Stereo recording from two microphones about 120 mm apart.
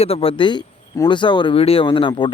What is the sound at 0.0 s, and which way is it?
Speech, 55° left (ahead or behind).